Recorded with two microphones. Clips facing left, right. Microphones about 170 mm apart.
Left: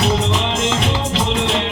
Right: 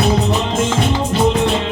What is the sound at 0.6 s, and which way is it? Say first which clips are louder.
Music: right 2 dB; 90° left.